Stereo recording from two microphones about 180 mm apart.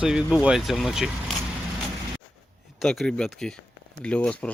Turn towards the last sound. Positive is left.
turn(degrees=5)  # may be behind; listen again after turning